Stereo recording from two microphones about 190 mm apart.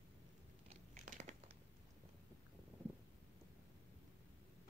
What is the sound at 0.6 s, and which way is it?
Biting, 40° right (ahead or behind).